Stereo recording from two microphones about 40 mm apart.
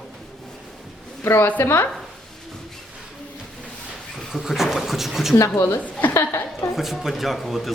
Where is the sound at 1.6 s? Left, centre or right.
Left.